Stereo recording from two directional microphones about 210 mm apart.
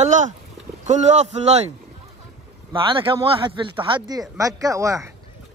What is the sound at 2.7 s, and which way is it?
Speech, 25° right (ahead or behind).